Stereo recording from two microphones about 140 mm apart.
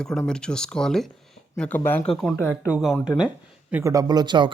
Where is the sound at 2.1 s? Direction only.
Centre (ahead or behind).